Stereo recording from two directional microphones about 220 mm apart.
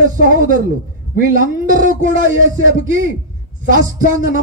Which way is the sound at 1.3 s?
35° right (ahead or behind).